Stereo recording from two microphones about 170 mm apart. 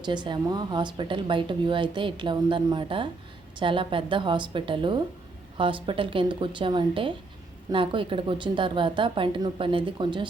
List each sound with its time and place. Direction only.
0.0 s speech: 25° right (ahead or behind)